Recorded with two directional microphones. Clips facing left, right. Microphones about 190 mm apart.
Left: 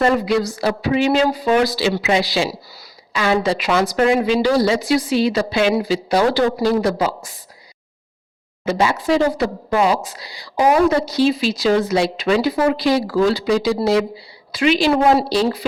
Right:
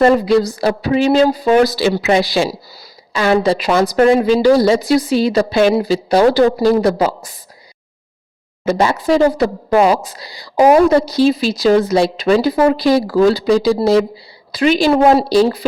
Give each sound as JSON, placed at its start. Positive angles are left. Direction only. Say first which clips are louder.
{"t": 0.0, "sound": "speech", "louder": "right 5 dB", "side_deg": -35}
{"t": 3.1, "sound": "speech", "louder": "right 4 dB", "side_deg": -35}
{"t": 8.6, "sound": "a woman's voice", "louder": "right 3 dB", "side_deg": -45}